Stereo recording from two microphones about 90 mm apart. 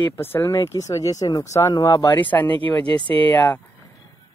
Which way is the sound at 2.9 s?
80° right.